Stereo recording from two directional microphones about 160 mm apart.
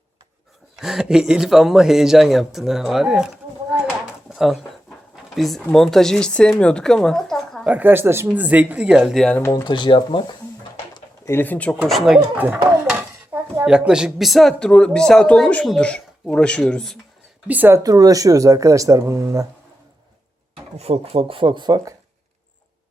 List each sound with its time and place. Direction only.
0.8 s speech: 5° right (ahead or behind)
4.0 s a sound: 5° right (ahead or behind)
5.1 s speech: centre (ahead or behind)
9.4 s speech: 20° left (ahead or behind)
11.3 s speech: 10° left (ahead or behind)
11.9 s speech: centre (ahead or behind)
17.5 s speech: 10° right (ahead or behind)
17.8 s speech: 25° right (ahead or behind)
20.7 s speech: 40° right (ahead or behind)